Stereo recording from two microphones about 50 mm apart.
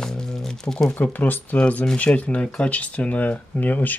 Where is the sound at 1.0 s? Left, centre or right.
Left.